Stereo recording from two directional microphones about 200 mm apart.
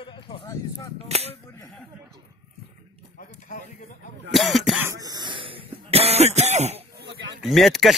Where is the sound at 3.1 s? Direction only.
40° left (ahead or behind).